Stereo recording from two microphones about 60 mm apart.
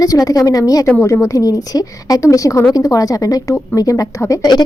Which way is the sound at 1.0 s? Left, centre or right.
Left.